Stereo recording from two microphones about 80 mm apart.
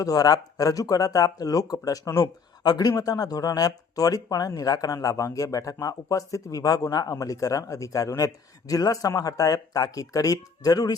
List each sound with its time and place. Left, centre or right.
0.0 s speech: left